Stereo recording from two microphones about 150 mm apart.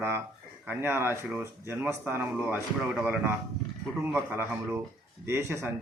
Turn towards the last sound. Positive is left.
turn(degrees=-20)  # may be behind; listen again after turning